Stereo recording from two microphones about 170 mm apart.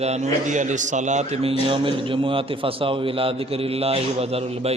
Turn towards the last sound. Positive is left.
turn(degrees=-35)  # may be behind; listen again after turning